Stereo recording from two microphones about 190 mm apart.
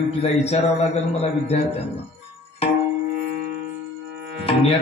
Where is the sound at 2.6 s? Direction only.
35° left (ahead or behind).